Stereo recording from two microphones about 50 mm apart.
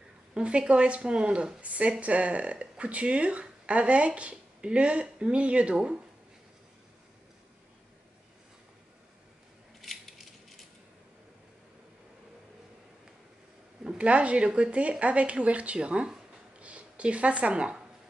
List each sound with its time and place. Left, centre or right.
0.3 s a woman's voice: right
9.8 s ratchet: centre
13.8 s a woman's voice: right
16.5 s a sound: right